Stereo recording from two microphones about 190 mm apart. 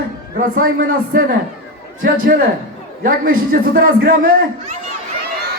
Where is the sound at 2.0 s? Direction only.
50° right (ahead or behind).